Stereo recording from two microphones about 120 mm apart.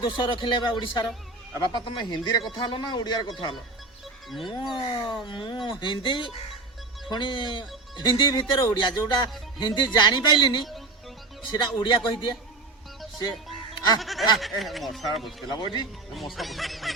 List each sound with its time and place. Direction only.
0.0 s speech: 40° left (ahead or behind)
4.4 s speech: 40° left (ahead or behind)
11.8 s speech: 40° left (ahead or behind)
14.0 s speech: centre (ahead or behind)
15.5 s speech: 40° left (ahead or behind)
16.1 s speech: centre (ahead or behind)